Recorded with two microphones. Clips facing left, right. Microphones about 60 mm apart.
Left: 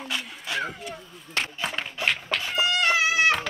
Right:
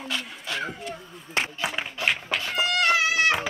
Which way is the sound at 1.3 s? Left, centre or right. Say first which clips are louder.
Right 1 dB; centre.